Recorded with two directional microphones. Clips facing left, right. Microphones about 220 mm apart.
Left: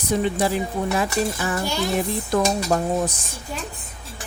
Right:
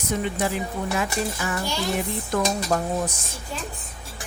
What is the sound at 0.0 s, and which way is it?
Speech, 35° left (ahead or behind).